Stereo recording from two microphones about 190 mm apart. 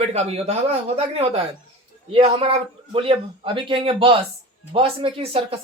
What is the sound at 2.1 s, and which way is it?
Speech, 30° right (ahead or behind).